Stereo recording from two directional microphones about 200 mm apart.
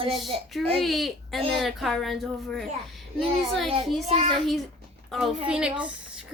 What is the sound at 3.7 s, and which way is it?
Speech, 30° right (ahead or behind).